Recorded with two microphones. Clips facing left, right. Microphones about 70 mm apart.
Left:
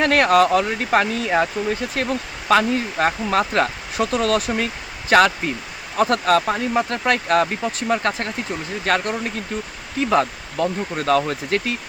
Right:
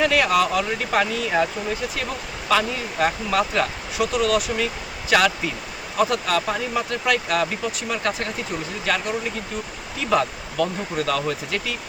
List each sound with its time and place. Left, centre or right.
0.0 s speech: left
2.5 s speech: left
10.0 s speech: left